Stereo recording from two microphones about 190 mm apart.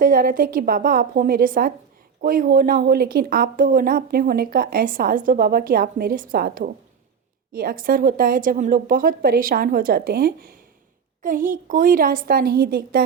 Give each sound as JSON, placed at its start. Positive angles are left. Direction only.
{"t": 0.0, "sound": "a woman's voice", "side_deg": -45}